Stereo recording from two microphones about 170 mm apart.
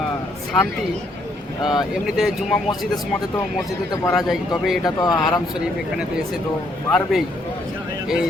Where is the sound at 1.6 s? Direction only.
Centre (ahead or behind).